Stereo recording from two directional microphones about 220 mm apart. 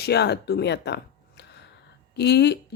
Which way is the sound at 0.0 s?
50° left (ahead or behind).